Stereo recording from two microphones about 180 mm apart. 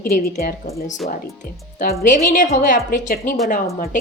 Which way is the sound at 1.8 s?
55° left (ahead or behind).